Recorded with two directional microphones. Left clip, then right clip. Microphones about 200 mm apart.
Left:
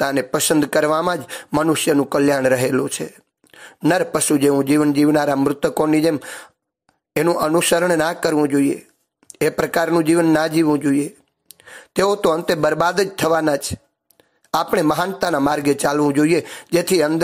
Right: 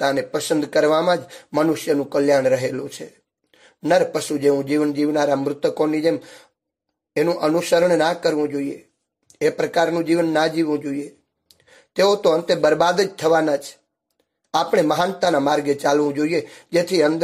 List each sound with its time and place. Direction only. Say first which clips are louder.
0.0 s speech: left 2 dB; 25° left (ahead or behind)